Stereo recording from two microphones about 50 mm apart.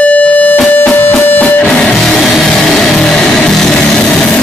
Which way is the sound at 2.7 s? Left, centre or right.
Centre.